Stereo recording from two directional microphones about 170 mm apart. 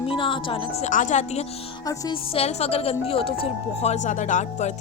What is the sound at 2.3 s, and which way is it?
Speech, 35° left (ahead or behind).